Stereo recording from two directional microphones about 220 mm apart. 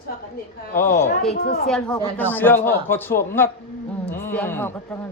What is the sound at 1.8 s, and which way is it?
A man's voice, 10° left (ahead or behind).